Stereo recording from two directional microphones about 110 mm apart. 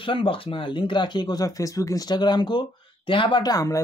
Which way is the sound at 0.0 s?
55° left (ahead or behind).